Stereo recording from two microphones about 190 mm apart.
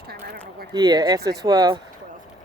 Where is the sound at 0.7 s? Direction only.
20° right (ahead or behind).